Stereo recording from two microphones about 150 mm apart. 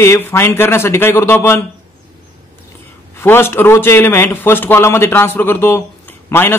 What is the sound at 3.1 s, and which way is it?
A man's voice, 15° left (ahead or behind).